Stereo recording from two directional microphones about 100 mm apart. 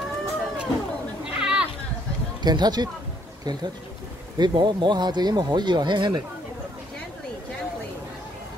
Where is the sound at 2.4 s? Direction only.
45° right (ahead or behind).